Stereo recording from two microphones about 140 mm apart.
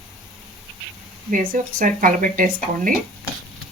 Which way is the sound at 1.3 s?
70° right (ahead or behind).